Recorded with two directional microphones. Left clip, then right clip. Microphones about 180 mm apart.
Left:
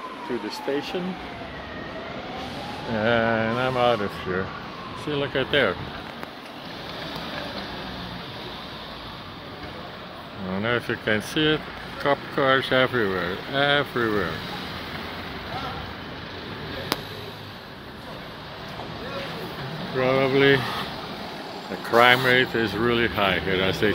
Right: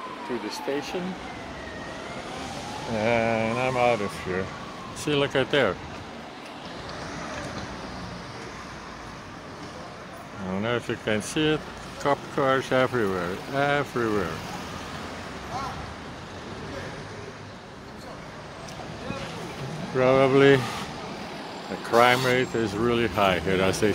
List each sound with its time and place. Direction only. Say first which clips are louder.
3.0 s speech: left 2 dB; centre (ahead or behind)
5.0 s speech: right 3 dB; 55° right (ahead or behind)
5.3 s speech: left 5 dB; 30° right (ahead or behind)
10.5 s speech: left 3 dB; 5° right (ahead or behind)
20.0 s speech: right 1 dB; 30° right (ahead or behind)
21.9 s speech: left 3 dB; 5° right (ahead or behind); by 23.9 s 25° right (ahead or behind)